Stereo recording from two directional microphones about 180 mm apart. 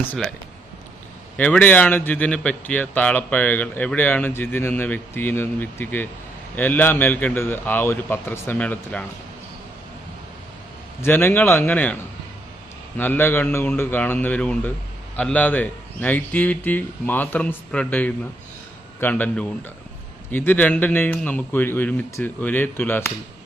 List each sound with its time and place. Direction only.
0.1 s speech: 5° left (ahead or behind)
1.4 s speech: 10° left (ahead or behind)
11.0 s speech: 10° left (ahead or behind)
13.0 s speech: 10° left (ahead or behind)